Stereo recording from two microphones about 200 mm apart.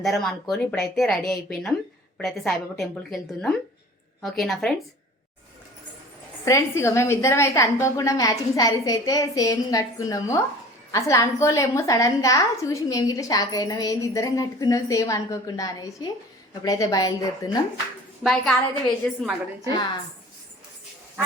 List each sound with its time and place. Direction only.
0.0 s speech: centre (ahead or behind)
6.4 s a woman's voice: 15° left (ahead or behind)
18.2 s speech: centre (ahead or behind)
19.7 s a woman's voice: 20° left (ahead or behind)